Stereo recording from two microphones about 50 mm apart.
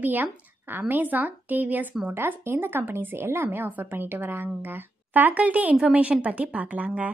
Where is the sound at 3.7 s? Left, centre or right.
Right.